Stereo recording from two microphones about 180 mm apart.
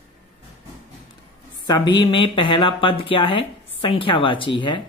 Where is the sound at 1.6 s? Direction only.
25° left (ahead or behind).